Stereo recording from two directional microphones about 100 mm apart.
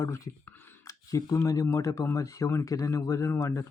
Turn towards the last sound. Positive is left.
turn(degrees=30)  # may be behind; listen again after turning